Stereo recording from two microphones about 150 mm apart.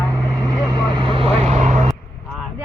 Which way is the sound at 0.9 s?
35° right (ahead or behind).